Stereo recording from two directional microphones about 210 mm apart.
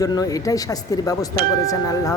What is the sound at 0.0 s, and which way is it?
A man's voice, 15° left (ahead or behind).